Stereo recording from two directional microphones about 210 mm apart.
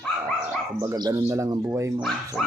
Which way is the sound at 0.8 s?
15° right (ahead or behind).